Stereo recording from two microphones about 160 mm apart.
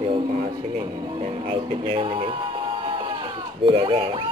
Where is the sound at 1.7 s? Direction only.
35° right (ahead or behind).